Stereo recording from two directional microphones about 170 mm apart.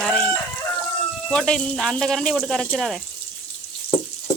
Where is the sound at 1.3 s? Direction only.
5° left (ahead or behind).